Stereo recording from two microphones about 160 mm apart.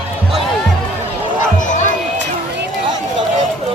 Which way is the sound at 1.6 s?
50° left (ahead or behind).